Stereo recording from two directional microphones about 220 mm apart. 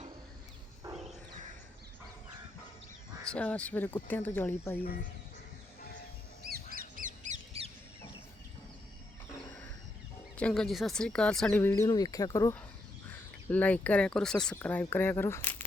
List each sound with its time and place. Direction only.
3.2 s speech: 5° left (ahead or behind)
6.7 s squawk: 40° right (ahead or behind)
10.3 s speech: 5° left (ahead or behind)
11.7 s speech: 20° left (ahead or behind)